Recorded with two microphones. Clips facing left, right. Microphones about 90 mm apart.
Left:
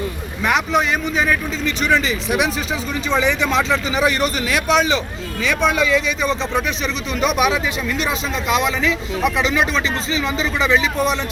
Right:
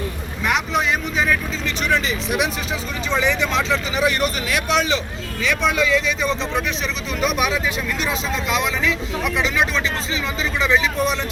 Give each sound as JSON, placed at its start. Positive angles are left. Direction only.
{"t": 0.4, "sound": "speech", "side_deg": 0}